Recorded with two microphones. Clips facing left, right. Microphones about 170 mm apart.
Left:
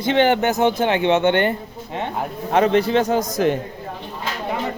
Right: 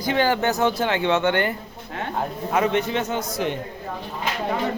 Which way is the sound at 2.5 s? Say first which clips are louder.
Left 6 dB; 35° left (ahead or behind).